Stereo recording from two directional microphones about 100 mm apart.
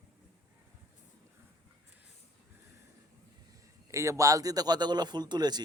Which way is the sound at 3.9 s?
30° right (ahead or behind).